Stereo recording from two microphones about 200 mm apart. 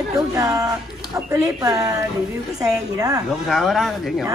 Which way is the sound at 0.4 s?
15° right (ahead or behind).